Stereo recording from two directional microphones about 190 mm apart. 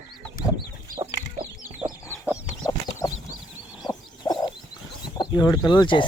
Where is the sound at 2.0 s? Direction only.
10° left (ahead or behind).